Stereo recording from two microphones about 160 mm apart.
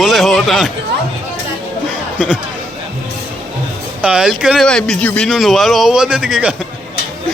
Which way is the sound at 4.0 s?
5° right (ahead or behind).